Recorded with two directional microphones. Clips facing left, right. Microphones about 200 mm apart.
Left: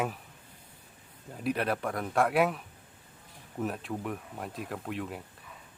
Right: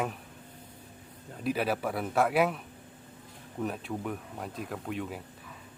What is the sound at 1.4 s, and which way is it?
Speech, centre (ahead or behind).